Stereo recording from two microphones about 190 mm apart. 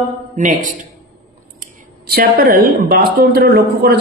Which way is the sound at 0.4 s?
45° right (ahead or behind).